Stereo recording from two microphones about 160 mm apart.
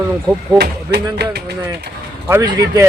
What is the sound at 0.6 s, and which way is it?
Speech, 85° right.